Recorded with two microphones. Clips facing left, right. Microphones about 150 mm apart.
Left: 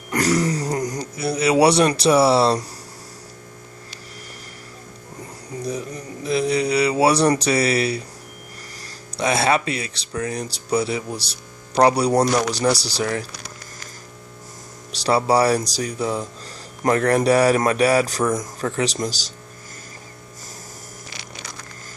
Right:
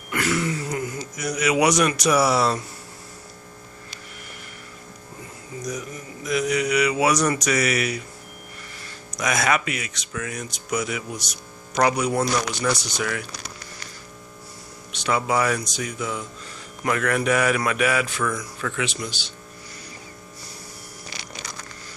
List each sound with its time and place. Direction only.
0.1 s speech: 40° left (ahead or behind)
5.6 s speech: 30° left (ahead or behind)
9.1 s speech: 30° left (ahead or behind)
14.9 s speech: 35° left (ahead or behind)